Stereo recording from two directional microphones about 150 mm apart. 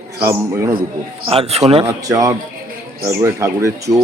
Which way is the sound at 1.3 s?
40° right (ahead or behind).